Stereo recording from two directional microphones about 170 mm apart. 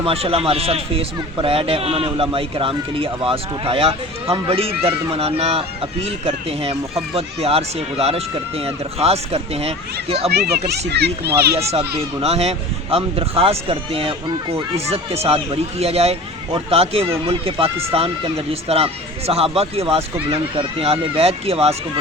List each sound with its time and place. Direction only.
0.0 s speech: 35° right (ahead or behind)
10.3 s a child's voice: 70° right (ahead or behind)
12.2 s speech: 35° right (ahead or behind)